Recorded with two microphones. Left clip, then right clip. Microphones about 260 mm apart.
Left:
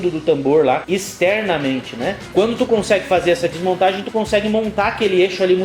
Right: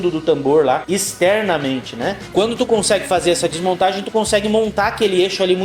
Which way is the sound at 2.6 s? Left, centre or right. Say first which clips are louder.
Even; right.